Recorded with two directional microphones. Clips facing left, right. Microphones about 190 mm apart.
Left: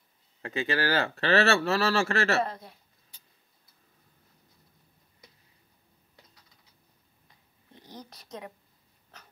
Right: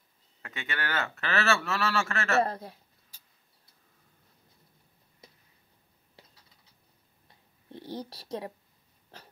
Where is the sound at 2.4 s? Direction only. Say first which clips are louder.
Right 2 dB; 40° right (ahead or behind).